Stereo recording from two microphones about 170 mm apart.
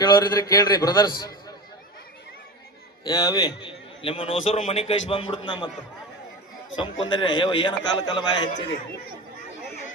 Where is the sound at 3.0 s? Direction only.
20° left (ahead or behind).